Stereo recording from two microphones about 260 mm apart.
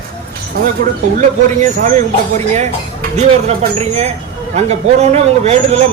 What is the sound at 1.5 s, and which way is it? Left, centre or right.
Speech, right.